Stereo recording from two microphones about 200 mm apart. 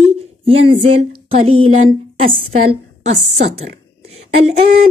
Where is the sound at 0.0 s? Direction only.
30° right (ahead or behind).